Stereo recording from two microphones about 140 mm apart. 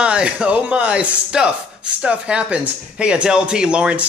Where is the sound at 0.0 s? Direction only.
5° right (ahead or behind).